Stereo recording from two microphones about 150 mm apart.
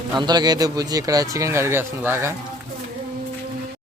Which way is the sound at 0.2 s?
30° right (ahead or behind).